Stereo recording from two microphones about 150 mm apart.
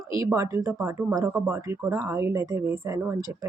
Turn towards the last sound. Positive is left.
turn(degrees=-20)  # may be behind; listen again after turning